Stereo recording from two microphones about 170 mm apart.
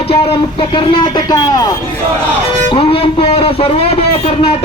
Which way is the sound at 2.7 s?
30° left (ahead or behind).